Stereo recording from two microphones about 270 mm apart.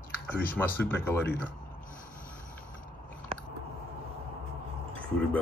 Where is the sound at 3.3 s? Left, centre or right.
Right.